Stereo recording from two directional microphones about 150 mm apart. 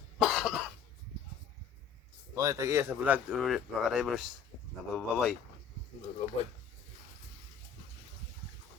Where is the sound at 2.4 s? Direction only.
20° right (ahead or behind); by 5.3 s centre (ahead or behind).